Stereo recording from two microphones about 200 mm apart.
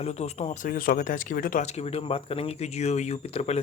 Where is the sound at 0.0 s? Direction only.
30° left (ahead or behind).